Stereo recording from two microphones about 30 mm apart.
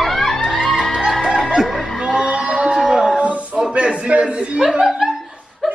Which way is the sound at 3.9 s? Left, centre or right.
Right.